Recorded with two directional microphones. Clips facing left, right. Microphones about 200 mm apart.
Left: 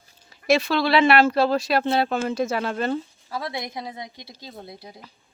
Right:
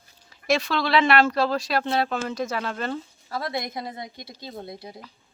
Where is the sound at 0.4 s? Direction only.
5° left (ahead or behind).